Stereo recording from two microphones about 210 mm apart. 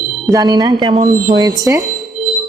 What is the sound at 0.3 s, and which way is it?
Speech, 15° right (ahead or behind).